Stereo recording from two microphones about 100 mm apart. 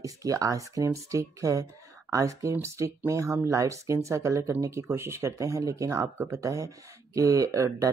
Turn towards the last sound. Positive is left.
turn(degrees=-30)  # may be behind; listen again after turning